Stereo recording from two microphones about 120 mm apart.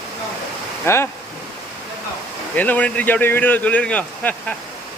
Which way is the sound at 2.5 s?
10° left (ahead or behind).